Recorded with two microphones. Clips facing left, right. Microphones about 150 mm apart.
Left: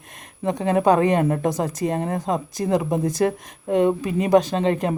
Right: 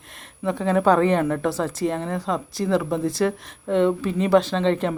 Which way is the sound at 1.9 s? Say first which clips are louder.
Left 2 dB; 45° left (ahead or behind).